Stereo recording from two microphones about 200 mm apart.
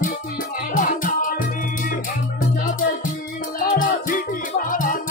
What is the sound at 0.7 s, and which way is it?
Music, 40° left (ahead or behind).